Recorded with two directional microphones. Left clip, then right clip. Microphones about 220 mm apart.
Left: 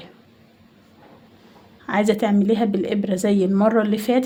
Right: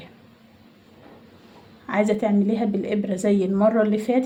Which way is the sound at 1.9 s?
40° left (ahead or behind).